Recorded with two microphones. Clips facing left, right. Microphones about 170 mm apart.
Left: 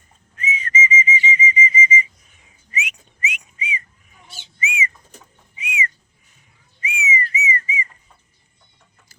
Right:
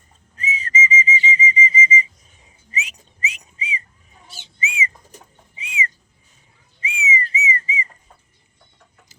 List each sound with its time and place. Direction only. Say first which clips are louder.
0.3 s whistle: left 1 dB; 35° right (ahead or behind)
4.6 s bird: left 1 dB; 30° right (ahead or behind)
5.5 s whistling: left 1 dB; 30° right (ahead or behind)